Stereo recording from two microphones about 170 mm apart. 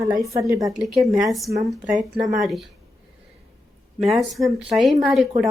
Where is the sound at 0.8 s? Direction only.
Centre (ahead or behind).